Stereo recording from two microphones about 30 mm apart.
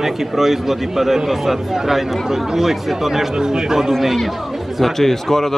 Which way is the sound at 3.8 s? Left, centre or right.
Centre.